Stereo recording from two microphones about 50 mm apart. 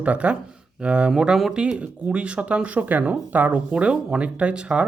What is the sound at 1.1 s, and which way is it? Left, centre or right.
Speech, centre.